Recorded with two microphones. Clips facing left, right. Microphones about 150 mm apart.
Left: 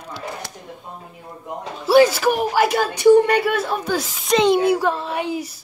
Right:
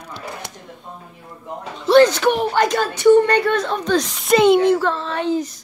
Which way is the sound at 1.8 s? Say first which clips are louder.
Right 1 dB; 5° left (ahead or behind).